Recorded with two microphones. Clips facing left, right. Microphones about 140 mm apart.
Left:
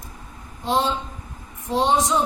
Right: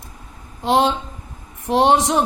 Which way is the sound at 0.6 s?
70° right (ahead or behind).